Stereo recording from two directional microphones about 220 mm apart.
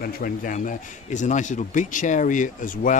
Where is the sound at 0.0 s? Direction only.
40° left (ahead or behind).